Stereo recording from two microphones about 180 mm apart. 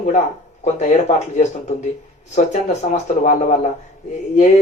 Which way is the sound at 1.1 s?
40° left (ahead or behind).